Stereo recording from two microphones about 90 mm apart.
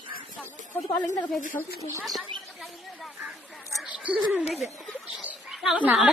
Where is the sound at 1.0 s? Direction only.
45° left (ahead or behind).